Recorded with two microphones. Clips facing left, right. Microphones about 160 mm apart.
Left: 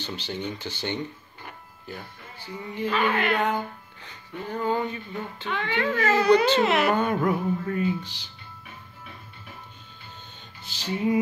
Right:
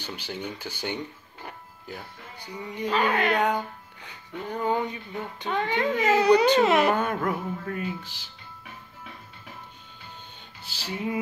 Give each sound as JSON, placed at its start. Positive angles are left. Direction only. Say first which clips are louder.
{"t": 0.0, "sound": "music", "louder": "left 2 dB", "side_deg": -10}
{"t": 6.6, "sound": "speech", "louder": "right 2 dB", "side_deg": -35}
{"t": 6.9, "sound": "speech", "louder": "left 2 dB", "side_deg": -5}
{"t": 10.6, "sound": "music", "louder": "left 5 dB", "side_deg": -10}